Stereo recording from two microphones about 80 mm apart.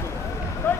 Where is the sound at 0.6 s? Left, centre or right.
Left.